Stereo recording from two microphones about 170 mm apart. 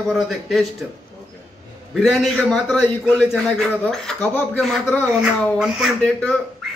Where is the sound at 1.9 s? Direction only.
Centre (ahead or behind).